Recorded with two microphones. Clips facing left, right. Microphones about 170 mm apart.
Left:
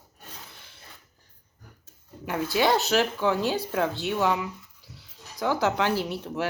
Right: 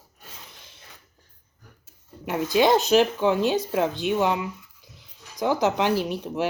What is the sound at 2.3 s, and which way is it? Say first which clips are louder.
Speech: right 4 dB; 15° right (ahead or behind).